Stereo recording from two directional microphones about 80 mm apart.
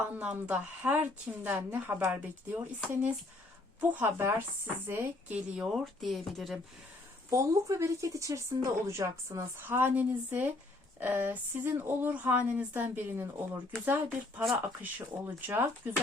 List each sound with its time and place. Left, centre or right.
0.2 s a woman's voice: centre
3.8 s a woman's voice: right
5.3 s speech: centre
5.7 s speech: centre
7.3 s a woman's voice: right